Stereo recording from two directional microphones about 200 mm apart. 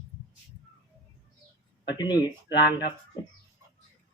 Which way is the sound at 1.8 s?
20° left (ahead or behind).